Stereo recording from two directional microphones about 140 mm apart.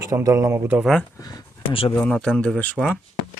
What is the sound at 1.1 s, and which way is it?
Speech, 30° left (ahead or behind).